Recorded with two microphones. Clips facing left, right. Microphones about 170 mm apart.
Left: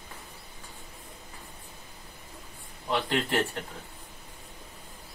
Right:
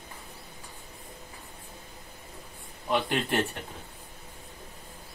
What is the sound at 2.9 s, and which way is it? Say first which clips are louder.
Speech: right 1 dB; 20° right (ahead or behind).